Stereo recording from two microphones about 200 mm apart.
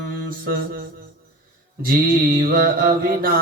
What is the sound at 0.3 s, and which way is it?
Mantra, 50° right (ahead or behind).